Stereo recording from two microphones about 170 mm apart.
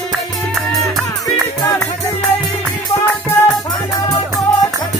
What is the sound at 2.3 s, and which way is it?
Music, 10° left (ahead or behind).